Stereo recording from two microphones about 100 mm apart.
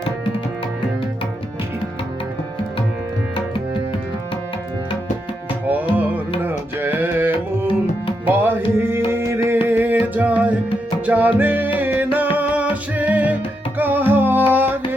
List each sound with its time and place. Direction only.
6.0 s music: 15° right (ahead or behind)
9.0 s a sound: 25° right (ahead or behind)
9.6 s music: 20° right (ahead or behind)